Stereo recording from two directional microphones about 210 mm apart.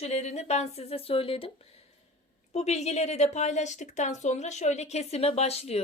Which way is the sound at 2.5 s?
30° left (ahead or behind).